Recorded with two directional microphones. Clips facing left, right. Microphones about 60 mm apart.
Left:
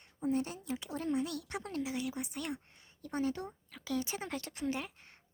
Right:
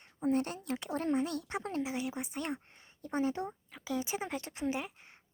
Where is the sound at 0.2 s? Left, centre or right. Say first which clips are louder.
Right 3 dB; right.